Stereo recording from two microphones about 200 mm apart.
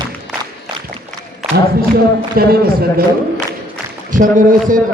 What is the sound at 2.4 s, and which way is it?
Speech, 50° right (ahead or behind).